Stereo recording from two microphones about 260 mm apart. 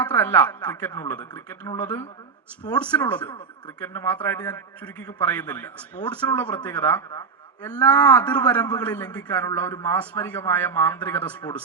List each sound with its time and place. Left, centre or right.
0.2 s a man's voice: centre